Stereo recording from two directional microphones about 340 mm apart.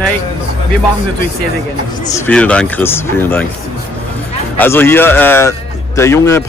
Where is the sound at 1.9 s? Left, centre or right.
Left.